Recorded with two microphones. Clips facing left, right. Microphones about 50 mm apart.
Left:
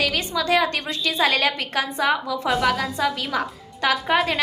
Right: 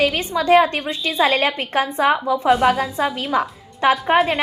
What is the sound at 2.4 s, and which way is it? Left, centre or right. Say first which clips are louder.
Speech: right 6 dB; centre.